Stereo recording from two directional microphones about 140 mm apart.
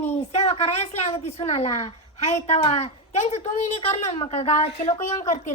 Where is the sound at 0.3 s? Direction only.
45° left (ahead or behind).